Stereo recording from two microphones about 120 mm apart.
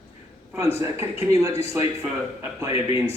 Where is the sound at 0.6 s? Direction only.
20° right (ahead or behind).